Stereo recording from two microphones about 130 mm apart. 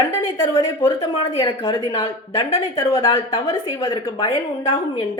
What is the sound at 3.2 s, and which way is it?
Speech, 45° left (ahead or behind).